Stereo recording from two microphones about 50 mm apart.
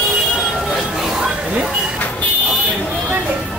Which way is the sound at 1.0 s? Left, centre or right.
Centre.